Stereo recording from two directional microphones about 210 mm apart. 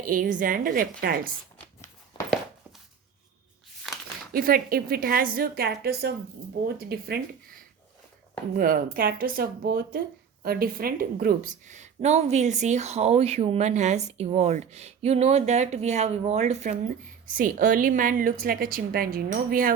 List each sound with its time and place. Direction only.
0.0 s a woman's voice: 40° right (ahead or behind)
4.3 s a woman's voice: 45° right (ahead or behind)